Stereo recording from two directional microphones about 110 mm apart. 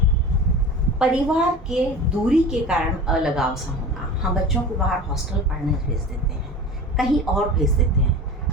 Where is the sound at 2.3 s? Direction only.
5° right (ahead or behind).